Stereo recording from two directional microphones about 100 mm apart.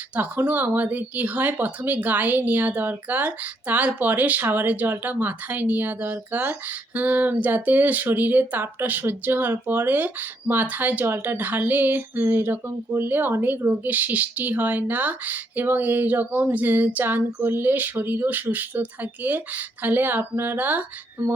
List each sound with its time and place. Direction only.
0.1 s speech: 15° right (ahead or behind)